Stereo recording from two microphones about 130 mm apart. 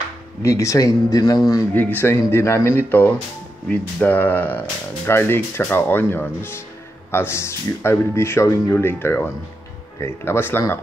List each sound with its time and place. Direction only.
0.4 s speech: 25° left (ahead or behind)
1.7 s speech: 15° left (ahead or behind)